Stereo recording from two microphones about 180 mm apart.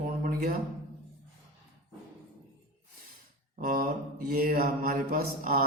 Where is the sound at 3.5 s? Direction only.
55° right (ahead or behind).